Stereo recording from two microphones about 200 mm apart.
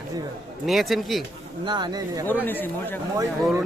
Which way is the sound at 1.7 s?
20° right (ahead or behind).